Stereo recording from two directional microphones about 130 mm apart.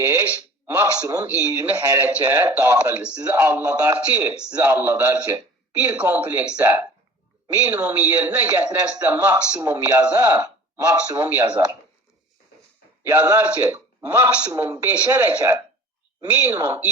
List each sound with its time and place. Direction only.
0.0 s a sound: 20° right (ahead or behind)
0.8 s a man's voice: 10° right (ahead or behind)
1.0 s a man's voice: 20° right (ahead or behind)
10.8 s a man's voice: 25° right (ahead or behind)
11.6 s a sound: 25° right (ahead or behind)
13.0 s a man's voice: 15° right (ahead or behind)